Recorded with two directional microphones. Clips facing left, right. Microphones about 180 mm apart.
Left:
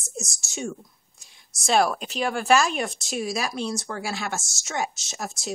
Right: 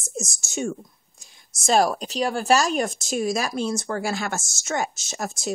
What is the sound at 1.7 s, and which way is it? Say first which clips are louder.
Speech: right 2 dB; 35° right (ahead or behind).